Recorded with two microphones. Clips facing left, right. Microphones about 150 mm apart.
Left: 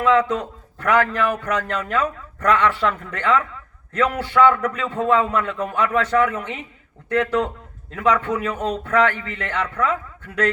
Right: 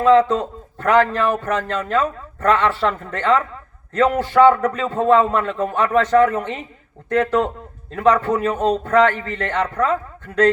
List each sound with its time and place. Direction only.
0.0 s speech: 35° right (ahead or behind)